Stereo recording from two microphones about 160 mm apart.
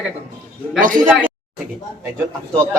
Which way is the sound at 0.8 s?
55° right (ahead or behind).